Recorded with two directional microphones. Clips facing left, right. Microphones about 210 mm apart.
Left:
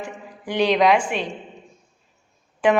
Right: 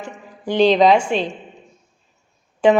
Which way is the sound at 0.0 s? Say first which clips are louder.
Right 2 dB; 25° right (ahead or behind).